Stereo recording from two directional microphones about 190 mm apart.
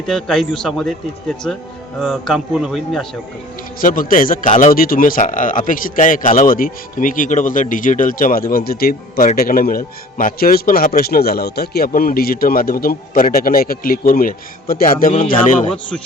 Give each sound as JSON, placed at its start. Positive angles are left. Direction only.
{"t": 0.1, "sound": "speech", "side_deg": 5}
{"t": 3.8, "sound": "a man's voice", "side_deg": 45}